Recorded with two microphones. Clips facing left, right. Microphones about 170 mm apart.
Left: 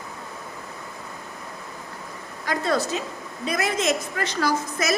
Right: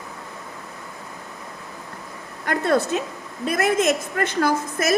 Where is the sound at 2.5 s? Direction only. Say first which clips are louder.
Right 4 dB; 60° right (ahead or behind).